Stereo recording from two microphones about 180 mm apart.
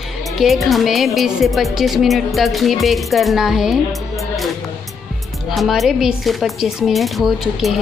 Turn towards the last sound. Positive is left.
turn(degrees=0)  # may be behind; listen again after turning